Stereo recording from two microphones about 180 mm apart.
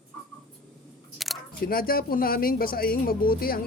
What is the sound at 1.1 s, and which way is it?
Single-lens reflex camera, centre (ahead or behind).